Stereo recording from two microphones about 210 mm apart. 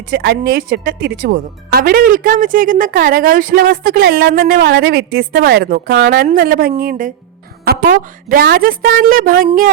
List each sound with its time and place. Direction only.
0.1 s speech: 55° right (ahead or behind)